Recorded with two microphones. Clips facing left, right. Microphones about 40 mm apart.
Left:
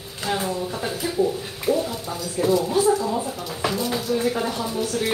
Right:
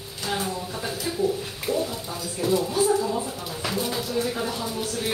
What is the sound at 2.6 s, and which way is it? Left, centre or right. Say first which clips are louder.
Speech: left 2 dB; left.